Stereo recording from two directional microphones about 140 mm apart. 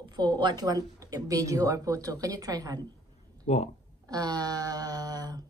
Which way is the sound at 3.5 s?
50° left (ahead or behind).